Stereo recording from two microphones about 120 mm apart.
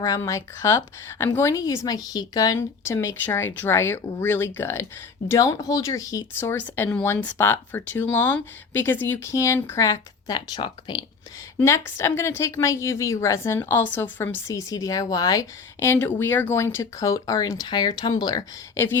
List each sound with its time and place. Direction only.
0.2 s a woman's voice: 25° left (ahead or behind); by 11.0 s 40° left (ahead or behind)
11.6 s a woman's voice: 25° left (ahead or behind)